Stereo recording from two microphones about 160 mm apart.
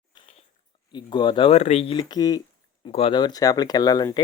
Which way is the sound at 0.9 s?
30° left (ahead or behind).